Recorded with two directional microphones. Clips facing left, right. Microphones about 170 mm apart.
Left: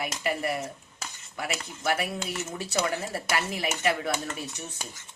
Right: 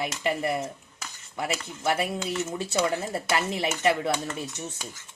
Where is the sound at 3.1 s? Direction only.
25° right (ahead or behind).